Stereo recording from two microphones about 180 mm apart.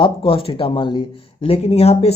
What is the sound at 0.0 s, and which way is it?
A man's voice, 30° left (ahead or behind).